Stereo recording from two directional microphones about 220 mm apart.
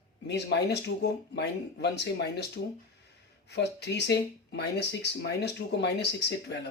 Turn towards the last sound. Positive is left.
turn(degrees=50)  # may be behind; listen again after turning